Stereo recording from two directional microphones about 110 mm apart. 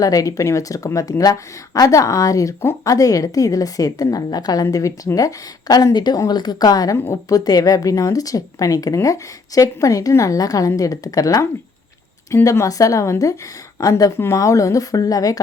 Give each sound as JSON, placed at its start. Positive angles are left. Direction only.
{"t": 0.0, "sound": "a woman's voice", "side_deg": 30}
{"t": 6.9, "sound": "a woman's voice", "side_deg": 20}
{"t": 7.3, "sound": "a woman's voice", "side_deg": 35}